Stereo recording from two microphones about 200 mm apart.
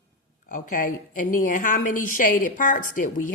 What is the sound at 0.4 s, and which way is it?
Speech, 40° left (ahead or behind).